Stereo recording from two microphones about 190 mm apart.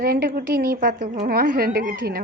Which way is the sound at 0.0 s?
50° right (ahead or behind).